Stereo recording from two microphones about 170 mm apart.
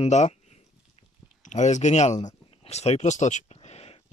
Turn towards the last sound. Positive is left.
turn(degrees=35)  # may be behind; listen again after turning